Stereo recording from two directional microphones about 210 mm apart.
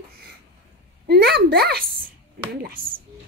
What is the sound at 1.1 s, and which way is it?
A woman's voice, 50° right (ahead or behind).